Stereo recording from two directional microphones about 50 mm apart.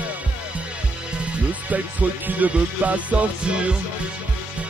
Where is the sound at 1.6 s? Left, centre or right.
Right.